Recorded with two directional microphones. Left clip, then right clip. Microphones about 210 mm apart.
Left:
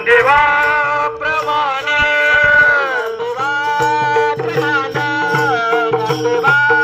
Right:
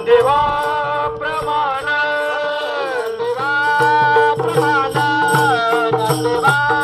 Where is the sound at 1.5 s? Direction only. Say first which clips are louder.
Left 2 dB; 15° left (ahead or behind).